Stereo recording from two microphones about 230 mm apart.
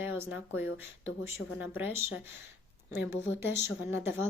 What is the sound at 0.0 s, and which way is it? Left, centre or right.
A woman's voice, centre.